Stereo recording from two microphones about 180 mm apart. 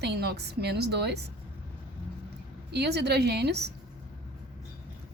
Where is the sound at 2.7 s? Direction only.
65° right (ahead or behind).